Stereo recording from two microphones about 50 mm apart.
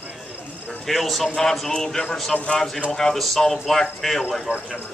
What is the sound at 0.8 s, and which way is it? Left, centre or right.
Speech, centre.